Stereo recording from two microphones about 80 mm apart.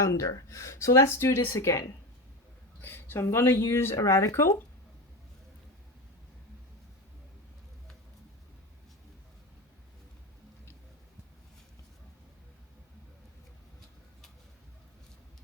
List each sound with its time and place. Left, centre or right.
0.0 s speech: left
2.8 s a sound: left
3.2 s speech: left